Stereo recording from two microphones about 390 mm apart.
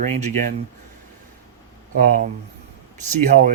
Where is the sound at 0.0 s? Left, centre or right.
Centre.